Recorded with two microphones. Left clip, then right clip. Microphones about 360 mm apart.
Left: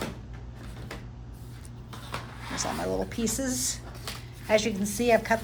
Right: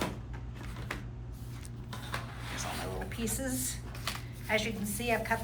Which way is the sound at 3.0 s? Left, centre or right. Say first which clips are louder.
Left 6 dB; centre.